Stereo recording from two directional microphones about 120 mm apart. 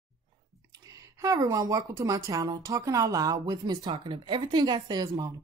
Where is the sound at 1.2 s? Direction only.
30° right (ahead or behind).